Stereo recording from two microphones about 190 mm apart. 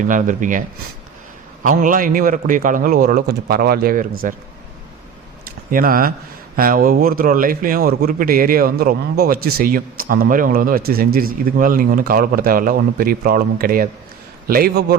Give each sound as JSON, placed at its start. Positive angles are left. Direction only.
{"t": 0.0, "sound": "a man's voice", "side_deg": -45}
{"t": 1.6, "sound": "a man's voice", "side_deg": -45}
{"t": 5.7, "sound": "a man's voice", "side_deg": -50}